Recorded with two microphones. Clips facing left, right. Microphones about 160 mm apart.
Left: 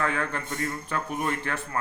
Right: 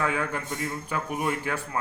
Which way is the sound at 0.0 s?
10° right (ahead or behind).